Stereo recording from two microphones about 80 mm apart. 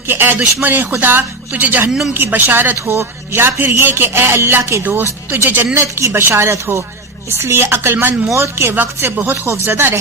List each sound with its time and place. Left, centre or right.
0.1 s a man's voice: right
1.9 s a woman's voice: centre
2.1 s a man's voice: right